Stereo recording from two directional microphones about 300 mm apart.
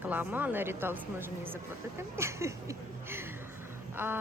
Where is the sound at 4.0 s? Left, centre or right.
Centre.